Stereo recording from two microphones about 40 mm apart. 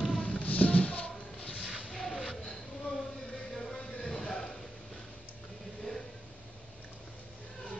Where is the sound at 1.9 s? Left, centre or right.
Centre.